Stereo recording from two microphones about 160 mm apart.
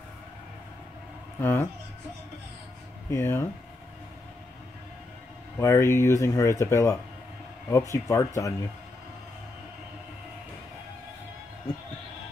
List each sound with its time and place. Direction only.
1.4 s speech: 10° left (ahead or behind)
3.1 s speech: 15° left (ahead or behind)
5.6 s speech: 20° left (ahead or behind)